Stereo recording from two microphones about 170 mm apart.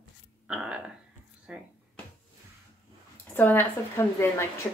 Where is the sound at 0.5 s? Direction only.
5° right (ahead or behind).